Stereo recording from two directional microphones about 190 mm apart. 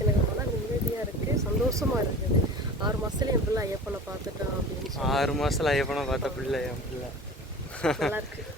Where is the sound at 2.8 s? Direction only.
20° right (ahead or behind).